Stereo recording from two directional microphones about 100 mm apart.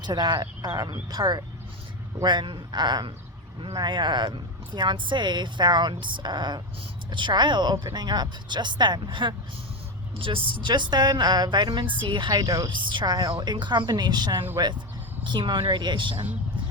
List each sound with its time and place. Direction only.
0.0 s speech: 45° right (ahead or behind)
10.2 s speech: 60° right (ahead or behind)
12.3 s speech: 40° right (ahead or behind)
12.7 s speech: 50° right (ahead or behind)